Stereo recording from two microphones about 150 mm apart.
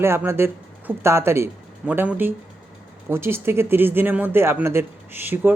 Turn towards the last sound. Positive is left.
turn(degrees=-15)  # may be behind; listen again after turning